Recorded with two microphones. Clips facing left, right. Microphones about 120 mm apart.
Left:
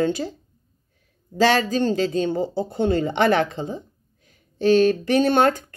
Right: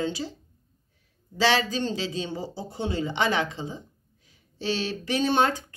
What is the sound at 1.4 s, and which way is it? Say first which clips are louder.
A woman's voice: left 5 dB; 45° left (ahead or behind).